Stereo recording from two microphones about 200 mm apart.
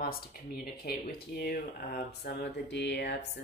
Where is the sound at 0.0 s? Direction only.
50° left (ahead or behind).